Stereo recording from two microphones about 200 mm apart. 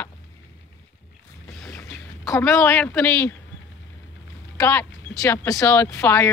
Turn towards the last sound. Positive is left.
turn(degrees=15)  # may be behind; listen again after turning